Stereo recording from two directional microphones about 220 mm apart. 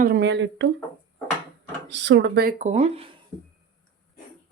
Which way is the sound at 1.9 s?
55° right (ahead or behind).